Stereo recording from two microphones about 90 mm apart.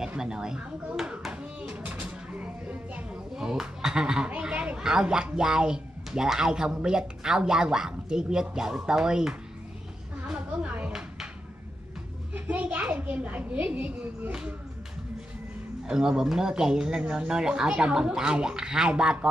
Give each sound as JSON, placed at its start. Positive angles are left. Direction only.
{"t": 0.0, "sound": "speech", "side_deg": -5}
{"t": 12.4, "sound": "speech", "side_deg": -15}
{"t": 15.9, "sound": "speech", "side_deg": -10}